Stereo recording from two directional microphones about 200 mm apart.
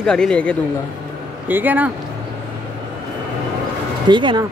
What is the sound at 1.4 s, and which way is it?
Speech, 10° right (ahead or behind).